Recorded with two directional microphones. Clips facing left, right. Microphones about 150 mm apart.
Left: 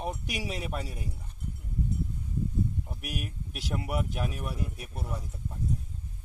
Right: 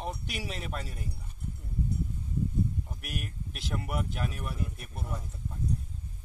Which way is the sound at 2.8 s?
10° left (ahead or behind).